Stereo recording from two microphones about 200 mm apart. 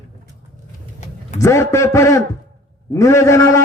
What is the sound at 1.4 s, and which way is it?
A man's voice, 15° left (ahead or behind).